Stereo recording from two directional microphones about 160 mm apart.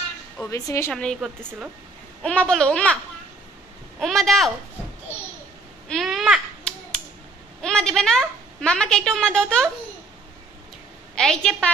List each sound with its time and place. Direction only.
0.5 s a woman's voice: 20° left (ahead or behind)
0.9 s a woman's voice: 5° left (ahead or behind)
4.0 s a woman's voice: centre (ahead or behind)
5.9 s a sound: centre (ahead or behind)
7.6 s a woman's voice: 5° left (ahead or behind)
11.1 s a woman's voice: 5° left (ahead or behind)